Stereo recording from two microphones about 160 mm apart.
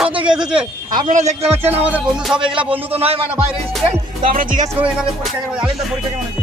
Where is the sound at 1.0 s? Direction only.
50° right (ahead or behind).